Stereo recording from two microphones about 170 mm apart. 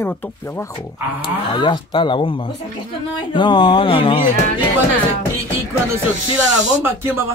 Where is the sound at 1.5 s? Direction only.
30° left (ahead or behind).